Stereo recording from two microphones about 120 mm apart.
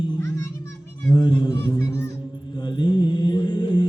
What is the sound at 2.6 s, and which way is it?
Mantra, 40° left (ahead or behind).